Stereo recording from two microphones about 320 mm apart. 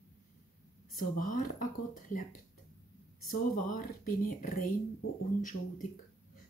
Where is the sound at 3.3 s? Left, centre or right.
Left.